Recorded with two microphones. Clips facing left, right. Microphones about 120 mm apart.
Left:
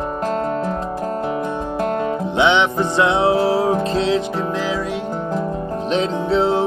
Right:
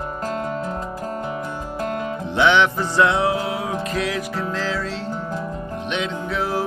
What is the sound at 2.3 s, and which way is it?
Music, 20° left (ahead or behind).